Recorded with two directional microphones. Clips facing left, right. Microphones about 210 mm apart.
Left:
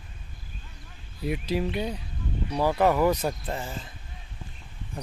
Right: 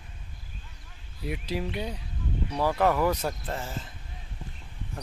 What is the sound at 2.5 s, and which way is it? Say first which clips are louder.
Speech: left 2 dB; 5° left (ahead or behind).